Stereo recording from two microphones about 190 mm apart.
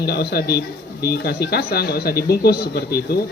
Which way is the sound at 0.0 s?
60° left (ahead or behind).